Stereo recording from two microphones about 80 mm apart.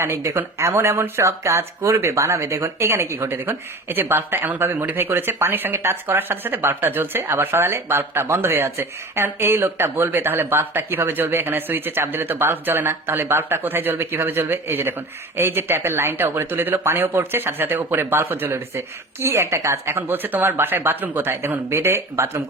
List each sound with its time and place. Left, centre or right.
0.0 s speech: right